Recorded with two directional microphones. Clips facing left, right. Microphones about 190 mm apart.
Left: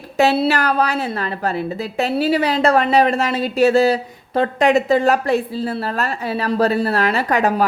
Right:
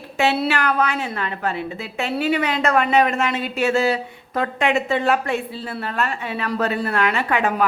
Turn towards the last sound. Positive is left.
turn(degrees=40)  # may be behind; listen again after turning